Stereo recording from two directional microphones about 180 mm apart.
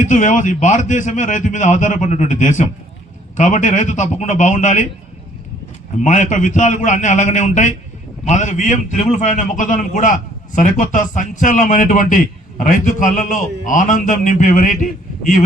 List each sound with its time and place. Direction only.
0.0 s a man's voice: 45° left (ahead or behind)
6.0 s a man's voice: 45° left (ahead or behind)